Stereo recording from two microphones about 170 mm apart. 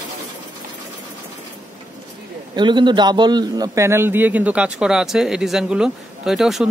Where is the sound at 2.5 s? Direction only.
25° right (ahead or behind).